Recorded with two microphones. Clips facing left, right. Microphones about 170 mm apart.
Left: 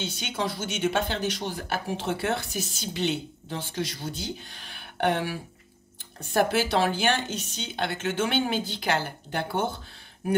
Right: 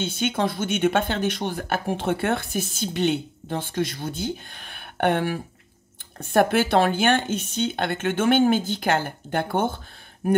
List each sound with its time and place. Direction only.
0.0 s speech: 55° right (ahead or behind)